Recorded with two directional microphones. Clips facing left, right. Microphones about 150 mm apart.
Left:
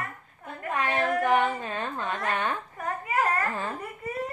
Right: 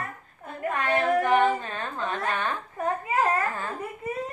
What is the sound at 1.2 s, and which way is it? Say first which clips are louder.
Humming: right 2 dB; 10° left (ahead or behind).